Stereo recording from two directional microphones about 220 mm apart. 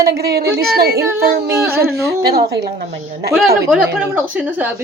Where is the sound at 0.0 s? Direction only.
45° right (ahead or behind).